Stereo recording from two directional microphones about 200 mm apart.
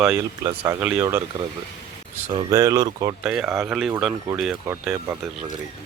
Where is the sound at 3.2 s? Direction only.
5° right (ahead or behind).